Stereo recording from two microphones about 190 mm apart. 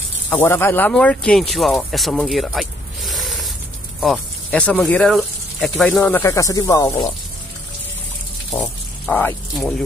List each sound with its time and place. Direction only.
0.3 s speech: 10° left (ahead or behind)
8.5 s speech: 10° left (ahead or behind)